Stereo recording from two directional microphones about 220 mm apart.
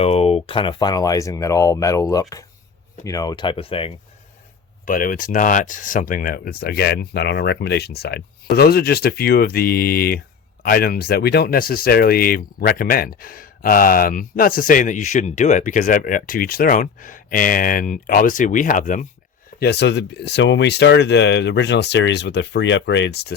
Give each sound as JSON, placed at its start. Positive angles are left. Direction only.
{"t": 0.0, "sound": "speech", "side_deg": 25}
{"t": 4.9, "sound": "speech", "side_deg": 40}
{"t": 19.5, "sound": "speech", "side_deg": 50}